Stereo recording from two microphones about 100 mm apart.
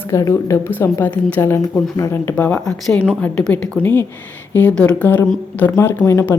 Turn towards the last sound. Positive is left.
turn(degrees=25)  # may be behind; listen again after turning